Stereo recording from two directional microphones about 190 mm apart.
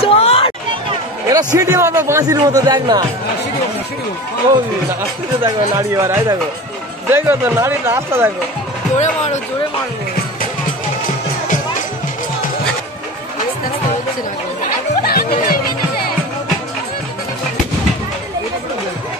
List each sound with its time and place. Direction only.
0.0 s chatter: 30° left (ahead or behind)
1.3 s a man's voice: 20° right (ahead or behind)
5.4 s speech: 15° right (ahead or behind)
8.9 s speech: 35° left (ahead or behind)
15.0 s music: 50° left (ahead or behind)